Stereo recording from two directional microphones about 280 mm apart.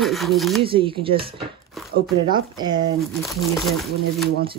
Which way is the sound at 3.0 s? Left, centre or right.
Centre.